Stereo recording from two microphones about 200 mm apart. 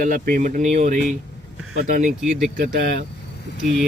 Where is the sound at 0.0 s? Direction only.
45° right (ahead or behind).